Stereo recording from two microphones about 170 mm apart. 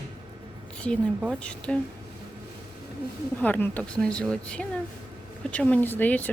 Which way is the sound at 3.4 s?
10° left (ahead or behind).